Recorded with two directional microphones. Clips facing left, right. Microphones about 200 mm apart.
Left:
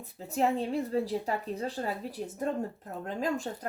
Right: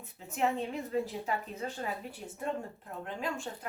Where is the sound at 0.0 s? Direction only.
35° left (ahead or behind).